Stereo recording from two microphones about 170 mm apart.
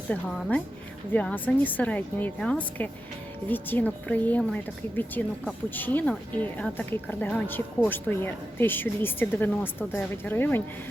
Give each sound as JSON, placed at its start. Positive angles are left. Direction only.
{"t": 0.1, "sound": "a woman's voice", "side_deg": 5}